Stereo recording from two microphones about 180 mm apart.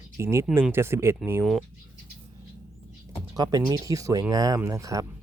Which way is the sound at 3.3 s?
20° right (ahead or behind).